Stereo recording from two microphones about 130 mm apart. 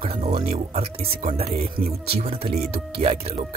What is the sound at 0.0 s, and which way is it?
Speech, 55° right (ahead or behind).